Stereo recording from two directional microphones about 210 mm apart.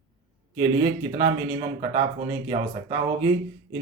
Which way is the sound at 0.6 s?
20° right (ahead or behind).